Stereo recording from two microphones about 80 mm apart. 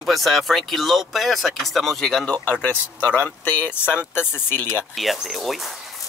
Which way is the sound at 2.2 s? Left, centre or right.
Centre.